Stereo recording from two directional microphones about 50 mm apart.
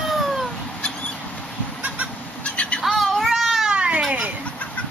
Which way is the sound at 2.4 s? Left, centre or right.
Left.